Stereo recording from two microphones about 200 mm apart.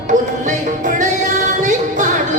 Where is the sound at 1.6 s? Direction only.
40° right (ahead or behind).